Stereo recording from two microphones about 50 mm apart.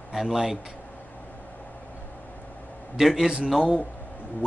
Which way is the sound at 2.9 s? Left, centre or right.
Centre.